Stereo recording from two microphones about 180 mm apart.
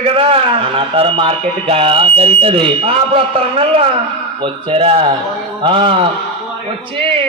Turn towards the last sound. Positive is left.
turn(degrees=-30)  # may be behind; listen again after turning